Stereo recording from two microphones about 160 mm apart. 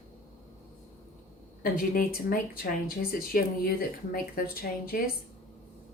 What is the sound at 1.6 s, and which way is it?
A woman's voice, 65° left (ahead or behind).